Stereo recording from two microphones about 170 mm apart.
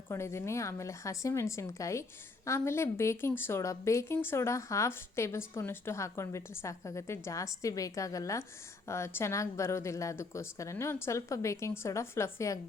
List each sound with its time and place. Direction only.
0.1 s speech: 15° left (ahead or behind)